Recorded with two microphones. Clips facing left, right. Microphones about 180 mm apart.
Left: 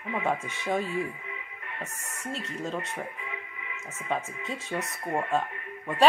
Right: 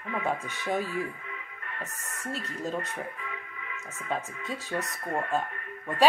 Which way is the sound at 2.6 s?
Centre (ahead or behind).